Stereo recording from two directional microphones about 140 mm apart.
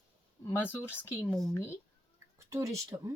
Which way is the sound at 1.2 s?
5° left (ahead or behind).